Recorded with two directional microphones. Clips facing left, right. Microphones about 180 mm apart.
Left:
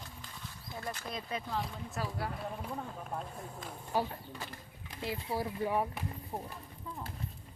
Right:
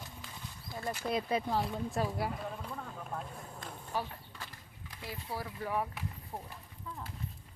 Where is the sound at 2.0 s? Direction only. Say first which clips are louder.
Right 4 dB; 30° right (ahead or behind).